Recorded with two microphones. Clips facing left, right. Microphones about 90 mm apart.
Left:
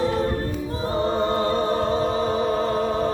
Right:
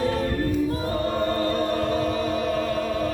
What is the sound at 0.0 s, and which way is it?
Choir, 30° left (ahead or behind).